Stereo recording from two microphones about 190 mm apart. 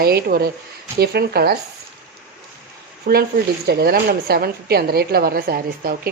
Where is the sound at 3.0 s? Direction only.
55° right (ahead or behind).